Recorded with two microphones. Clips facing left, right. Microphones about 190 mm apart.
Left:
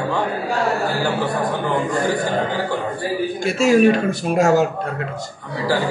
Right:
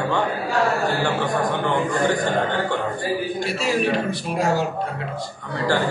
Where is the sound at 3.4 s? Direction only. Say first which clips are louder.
Left 12 dB; 45° left (ahead or behind).